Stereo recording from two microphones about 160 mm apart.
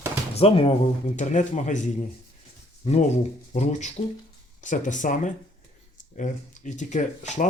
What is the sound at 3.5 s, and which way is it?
Speech, 45° left (ahead or behind).